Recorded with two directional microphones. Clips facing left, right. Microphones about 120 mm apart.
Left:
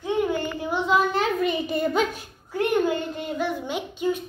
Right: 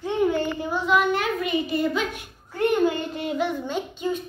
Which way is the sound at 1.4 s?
45° left (ahead or behind).